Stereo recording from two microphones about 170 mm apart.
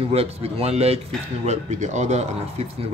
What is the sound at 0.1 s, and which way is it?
A man's voice, 35° right (ahead or behind).